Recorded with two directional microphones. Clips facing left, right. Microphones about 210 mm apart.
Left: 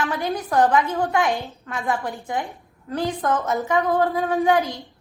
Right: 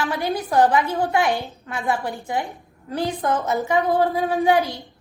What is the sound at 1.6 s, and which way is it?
Speech, 15° right (ahead or behind).